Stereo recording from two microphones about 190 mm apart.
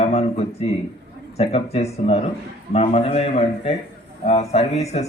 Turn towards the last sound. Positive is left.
turn(degrees=35)  # may be behind; listen again after turning